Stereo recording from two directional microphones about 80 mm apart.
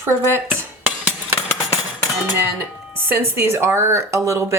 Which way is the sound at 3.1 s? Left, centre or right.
Right.